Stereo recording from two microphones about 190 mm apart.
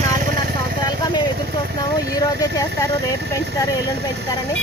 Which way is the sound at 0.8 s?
20° left (ahead or behind).